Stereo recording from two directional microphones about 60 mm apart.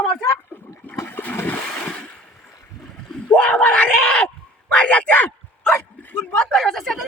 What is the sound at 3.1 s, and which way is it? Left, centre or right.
Speech, centre.